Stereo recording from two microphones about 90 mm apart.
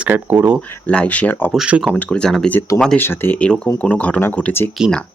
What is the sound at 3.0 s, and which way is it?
Speech, 25° left (ahead or behind).